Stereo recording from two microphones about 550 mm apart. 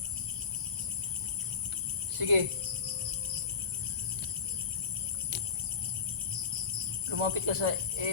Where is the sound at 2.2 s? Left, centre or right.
Right.